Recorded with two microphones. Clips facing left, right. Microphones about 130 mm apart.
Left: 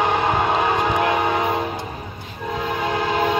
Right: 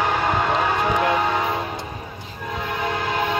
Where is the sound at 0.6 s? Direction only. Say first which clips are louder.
Left 1 dB; 20° left (ahead or behind).